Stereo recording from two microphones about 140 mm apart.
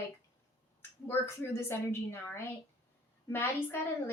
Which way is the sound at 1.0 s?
15° left (ahead or behind).